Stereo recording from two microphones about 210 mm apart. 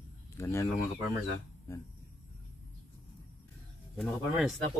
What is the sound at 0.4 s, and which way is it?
Speech, 15° left (ahead or behind).